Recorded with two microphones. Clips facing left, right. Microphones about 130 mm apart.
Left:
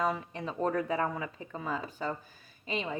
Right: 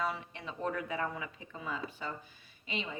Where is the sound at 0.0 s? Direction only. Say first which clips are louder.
Left 5 dB; 40° left (ahead or behind).